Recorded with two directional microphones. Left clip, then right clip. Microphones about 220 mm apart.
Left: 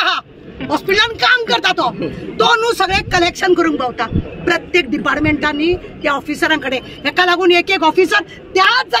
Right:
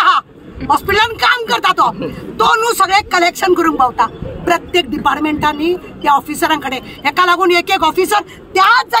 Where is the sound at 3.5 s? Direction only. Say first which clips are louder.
Right 3 dB; 30° right (ahead or behind).